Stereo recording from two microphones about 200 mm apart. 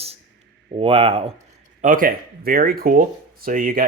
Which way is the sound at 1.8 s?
45° right (ahead or behind).